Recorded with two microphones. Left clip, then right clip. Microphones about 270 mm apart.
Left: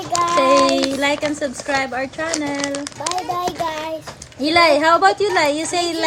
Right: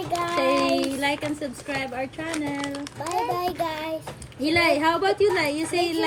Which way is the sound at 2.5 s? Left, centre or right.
Left.